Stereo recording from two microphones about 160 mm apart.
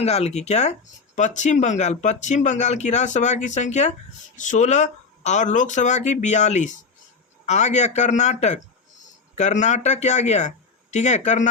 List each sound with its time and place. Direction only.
0.0 s speech: 40° left (ahead or behind)